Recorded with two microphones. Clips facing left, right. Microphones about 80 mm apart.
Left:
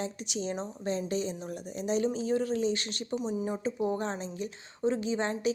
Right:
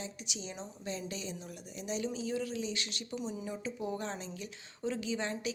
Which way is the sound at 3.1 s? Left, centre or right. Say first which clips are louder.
Left 7 dB; left.